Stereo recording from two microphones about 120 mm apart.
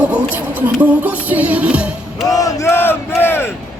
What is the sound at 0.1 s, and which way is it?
Music, 15° right (ahead or behind).